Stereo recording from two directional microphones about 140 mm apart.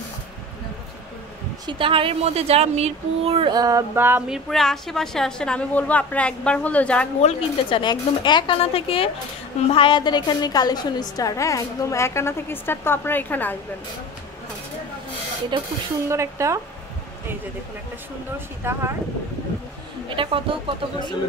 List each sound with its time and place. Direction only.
1.7 s a woman's voice: 40° right (ahead or behind)
3.5 s a sound: 25° right (ahead or behind)
4.3 s a woman's voice: 5° left (ahead or behind)
7.2 s a woman's voice: 50° left (ahead or behind)
7.8 s a woman's voice: 35° left (ahead or behind); by 13.6 s 15° left (ahead or behind)
15.5 s speech: 35° right (ahead or behind)
16.1 s a sound: 20° right (ahead or behind)
18.6 s speech: 20° right (ahead or behind)
20.2 s speech: 40° right (ahead or behind)